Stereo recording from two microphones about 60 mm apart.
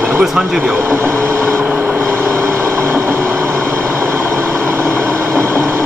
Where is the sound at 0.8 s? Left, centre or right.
Right.